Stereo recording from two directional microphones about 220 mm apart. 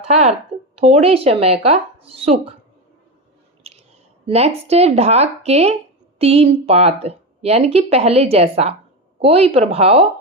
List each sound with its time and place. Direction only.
0.1 s speech: 30° right (ahead or behind)
3.6 s a sound: 30° right (ahead or behind)
4.3 s speech: 30° right (ahead or behind)